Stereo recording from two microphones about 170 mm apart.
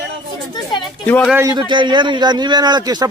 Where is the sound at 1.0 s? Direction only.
10° left (ahead or behind).